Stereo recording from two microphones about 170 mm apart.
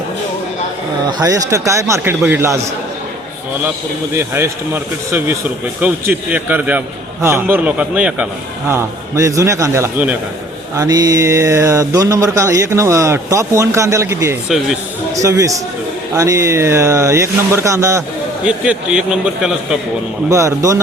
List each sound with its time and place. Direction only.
1.2 s speech: 20° right (ahead or behind)
4.1 s speech: 15° right (ahead or behind)
18.4 s a man's voice: 5° right (ahead or behind)
20.3 s speech: 20° right (ahead or behind)